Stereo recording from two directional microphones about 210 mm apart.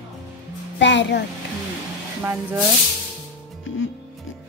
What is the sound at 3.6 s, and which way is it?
Music, 70° left (ahead or behind).